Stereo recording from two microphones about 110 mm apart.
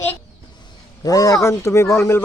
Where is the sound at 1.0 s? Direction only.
35° left (ahead or behind).